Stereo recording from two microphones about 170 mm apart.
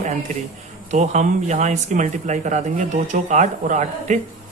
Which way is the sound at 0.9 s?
45° right (ahead or behind).